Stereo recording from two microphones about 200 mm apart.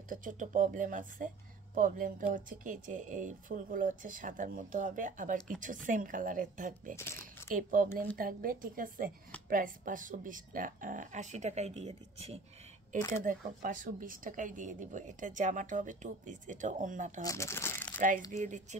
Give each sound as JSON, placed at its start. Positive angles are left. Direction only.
{"t": 0.1, "sound": "speech", "side_deg": -40}
{"t": 7.0, "sound": "speech", "side_deg": 10}
{"t": 7.5, "sound": "a woman's voice", "side_deg": -40}
{"t": 13.2, "sound": "speech", "side_deg": -40}
{"t": 17.2, "sound": "speech", "side_deg": 15}
{"t": 17.9, "sound": "speech", "side_deg": -40}